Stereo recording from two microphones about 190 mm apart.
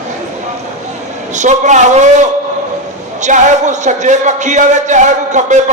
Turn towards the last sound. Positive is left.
turn(degrees=-40)  # may be behind; listen again after turning